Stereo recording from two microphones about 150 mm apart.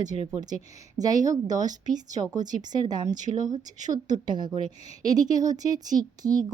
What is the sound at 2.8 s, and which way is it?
Speech, 30° right (ahead or behind).